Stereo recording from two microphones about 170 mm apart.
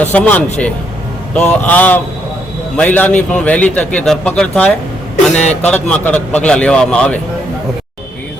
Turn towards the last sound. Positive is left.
turn(degrees=5)  # may be behind; listen again after turning